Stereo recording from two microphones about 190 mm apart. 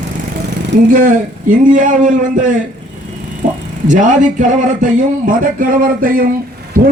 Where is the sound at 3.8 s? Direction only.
40° right (ahead or behind).